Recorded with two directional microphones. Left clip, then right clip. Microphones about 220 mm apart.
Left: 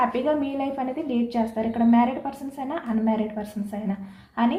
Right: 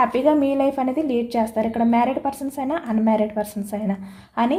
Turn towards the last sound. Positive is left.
turn(degrees=-50)  # may be behind; listen again after turning